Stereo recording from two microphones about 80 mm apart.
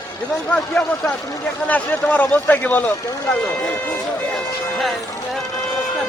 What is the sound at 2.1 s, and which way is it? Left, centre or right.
Speech, centre.